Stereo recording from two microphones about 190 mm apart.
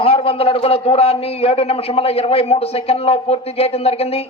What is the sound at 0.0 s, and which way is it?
A man's voice, 30° left (ahead or behind).